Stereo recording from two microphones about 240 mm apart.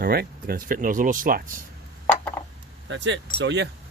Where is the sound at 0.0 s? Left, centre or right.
Right.